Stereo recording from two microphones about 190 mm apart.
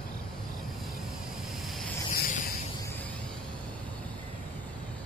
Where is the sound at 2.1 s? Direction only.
50° left (ahead or behind).